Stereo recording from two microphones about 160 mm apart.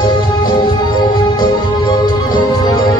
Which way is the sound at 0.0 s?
25° left (ahead or behind).